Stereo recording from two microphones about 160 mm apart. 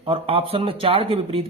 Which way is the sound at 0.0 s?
35° right (ahead or behind).